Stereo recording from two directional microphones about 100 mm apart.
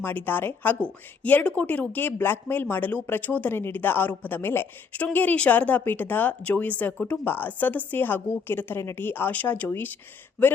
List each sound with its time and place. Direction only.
0.0 s a woman's voice: 20° left (ahead or behind)